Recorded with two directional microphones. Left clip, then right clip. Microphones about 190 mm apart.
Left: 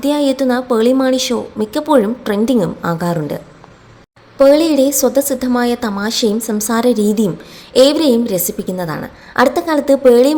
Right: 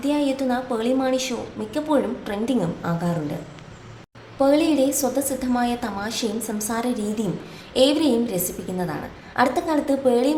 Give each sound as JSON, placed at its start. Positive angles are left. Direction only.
{"t": 0.0, "sound": "a woman's voice", "side_deg": 40}
{"t": 4.4, "sound": "a woman's voice", "side_deg": 35}